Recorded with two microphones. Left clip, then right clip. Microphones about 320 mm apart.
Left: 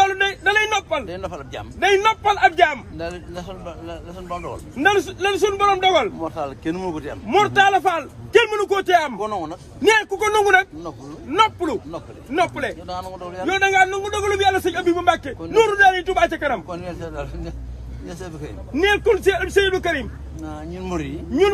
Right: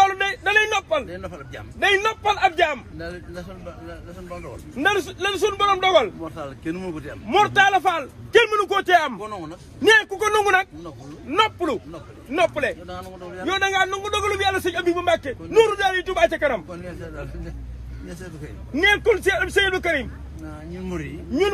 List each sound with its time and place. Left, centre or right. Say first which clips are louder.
0.0 s vehicle: left 1 dB; centre
1.0 s speech: left 5 dB; centre
1.8 s a man's voice: left 3 dB; centre
3.0 s speech: left 4 dB; centre
4.7 s a man's voice: left 3 dB; centre
6.2 s speech: left 5 dB; left
7.2 s a man's voice: left 1 dB; centre
9.2 s speech: left 7 dB; left
9.8 s a man's voice: even; centre
12.8 s speech: left 5 dB; centre
13.5 s a man's voice: left 4 dB; centre
18.8 s a man's voice: left 1 dB; centre
20.4 s speech: left 4 dB; centre